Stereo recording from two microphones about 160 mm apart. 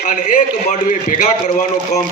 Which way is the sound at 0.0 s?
50° left (ahead or behind).